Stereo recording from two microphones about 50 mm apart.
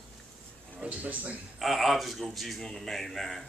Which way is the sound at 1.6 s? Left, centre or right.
Centre.